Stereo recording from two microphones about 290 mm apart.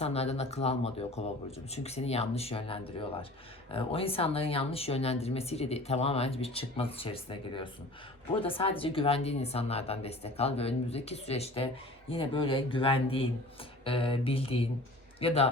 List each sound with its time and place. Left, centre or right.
0.0 s a woman's voice: left